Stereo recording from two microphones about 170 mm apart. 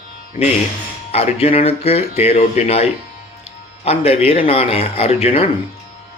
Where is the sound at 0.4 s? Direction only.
30° left (ahead or behind).